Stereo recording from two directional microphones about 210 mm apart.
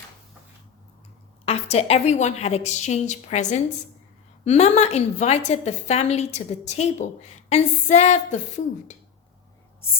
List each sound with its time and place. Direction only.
1.5 s a woman's voice: 30° left (ahead or behind)